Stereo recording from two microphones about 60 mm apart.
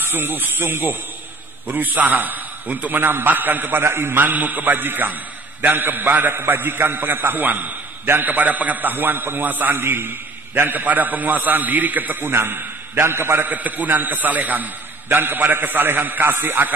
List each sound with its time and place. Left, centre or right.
0.1 s a man's voice: right
1.8 s a man's voice: right
13.5 s a man's voice: right